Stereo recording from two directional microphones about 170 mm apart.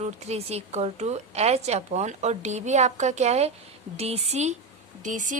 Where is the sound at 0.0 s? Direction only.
40° right (ahead or behind).